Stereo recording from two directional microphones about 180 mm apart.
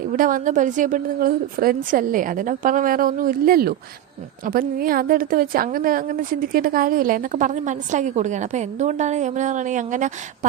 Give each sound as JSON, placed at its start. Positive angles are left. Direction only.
{"t": 0.2, "sound": "a woman's voice", "side_deg": -50}